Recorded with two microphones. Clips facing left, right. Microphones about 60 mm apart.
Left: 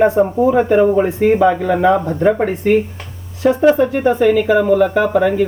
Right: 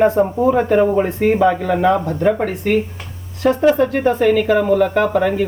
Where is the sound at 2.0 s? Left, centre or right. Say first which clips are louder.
Left 2 dB; left.